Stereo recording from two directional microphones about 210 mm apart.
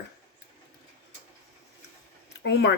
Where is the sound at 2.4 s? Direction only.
55° left (ahead or behind).